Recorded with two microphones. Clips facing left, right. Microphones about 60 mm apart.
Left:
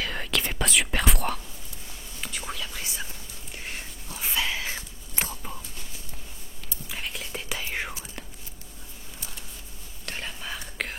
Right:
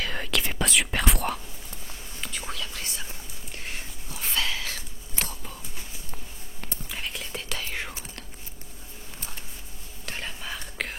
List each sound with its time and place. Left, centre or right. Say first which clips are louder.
0.0 s whispering: even; centre
2.7 s whispering: even; centre
3.5 s whispering: even; centre
4.4 s whispering: left 1 dB; centre
6.9 s whispering: left 1 dB; centre
7.4 s whispering: left 3 dB; centre
10.0 s whispering: even; centre